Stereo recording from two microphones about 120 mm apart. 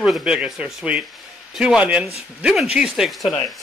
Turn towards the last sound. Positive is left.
turn(degrees=0)  # may be behind; listen again after turning